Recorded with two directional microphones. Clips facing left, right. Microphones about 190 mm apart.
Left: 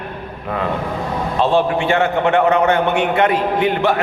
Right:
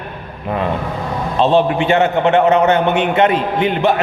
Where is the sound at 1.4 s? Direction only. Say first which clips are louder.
Right 3 dB; 20° right (ahead or behind).